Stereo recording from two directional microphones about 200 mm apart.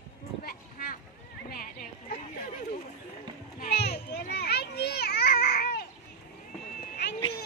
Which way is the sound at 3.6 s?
55° left (ahead or behind).